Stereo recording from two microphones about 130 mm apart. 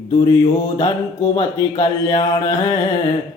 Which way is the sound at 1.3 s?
35° left (ahead or behind).